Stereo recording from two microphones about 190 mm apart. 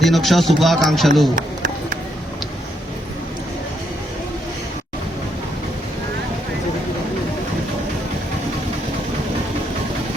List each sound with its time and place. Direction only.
0.0 s a man's voice: centre (ahead or behind)
1.4 s run: 45° right (ahead or behind)